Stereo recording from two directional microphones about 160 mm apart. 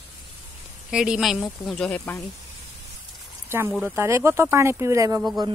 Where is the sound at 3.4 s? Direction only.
15° right (ahead or behind).